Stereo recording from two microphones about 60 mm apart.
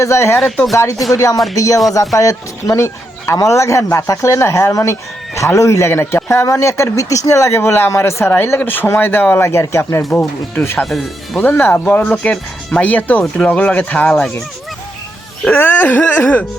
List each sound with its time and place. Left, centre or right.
0.0 s speech: left
0.8 s speech: left
5.9 s speech: left
8.4 s speech: left
9.4 s speech: left
12.1 s speech: centre
15.4 s speech: left